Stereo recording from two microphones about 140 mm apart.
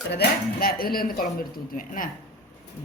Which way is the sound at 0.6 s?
90° left.